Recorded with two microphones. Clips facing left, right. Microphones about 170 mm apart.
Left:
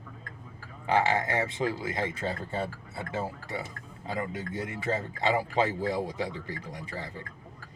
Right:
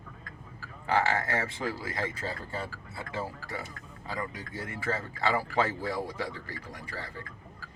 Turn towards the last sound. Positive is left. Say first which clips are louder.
# left 2 dB
turn(degrees=20)  # may be behind; listen again after turning